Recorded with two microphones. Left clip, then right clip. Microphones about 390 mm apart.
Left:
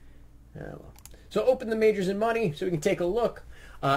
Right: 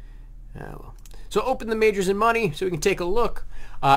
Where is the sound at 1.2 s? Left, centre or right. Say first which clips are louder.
Right 1 dB; right.